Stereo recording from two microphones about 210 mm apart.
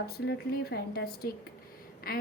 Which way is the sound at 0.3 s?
50° left (ahead or behind).